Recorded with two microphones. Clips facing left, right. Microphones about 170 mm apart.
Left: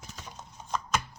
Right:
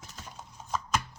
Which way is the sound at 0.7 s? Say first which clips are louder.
Even; 5° right (ahead or behind).